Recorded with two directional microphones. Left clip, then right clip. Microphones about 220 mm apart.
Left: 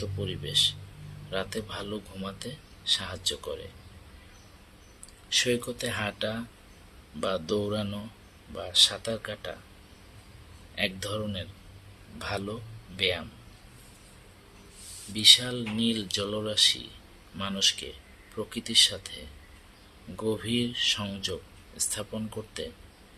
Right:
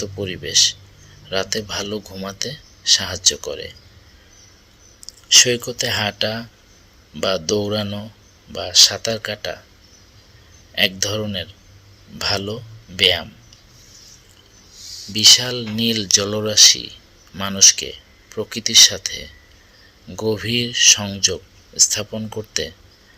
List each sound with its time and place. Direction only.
0.2 s speech: 20° right (ahead or behind)
5.3 s speech: 25° right (ahead or behind)
10.8 s speech: 25° right (ahead or behind)
15.1 s speech: 25° right (ahead or behind)